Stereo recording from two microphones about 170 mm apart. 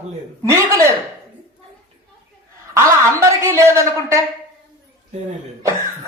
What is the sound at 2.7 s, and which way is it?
A woman's voice, 20° right (ahead or behind).